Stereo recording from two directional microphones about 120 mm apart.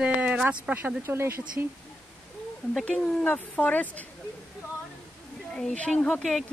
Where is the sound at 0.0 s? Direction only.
10° right (ahead or behind).